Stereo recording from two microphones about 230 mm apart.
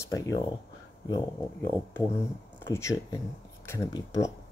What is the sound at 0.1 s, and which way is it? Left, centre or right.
Speech, centre.